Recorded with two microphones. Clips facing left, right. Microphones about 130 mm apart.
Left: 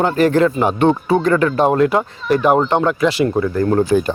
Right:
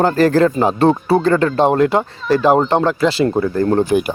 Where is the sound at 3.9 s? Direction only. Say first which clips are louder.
Left 1 dB; 15° right (ahead or behind).